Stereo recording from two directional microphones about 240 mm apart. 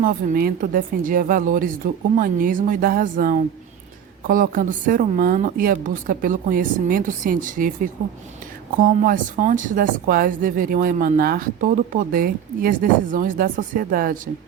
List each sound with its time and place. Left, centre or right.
0.0 s speech: right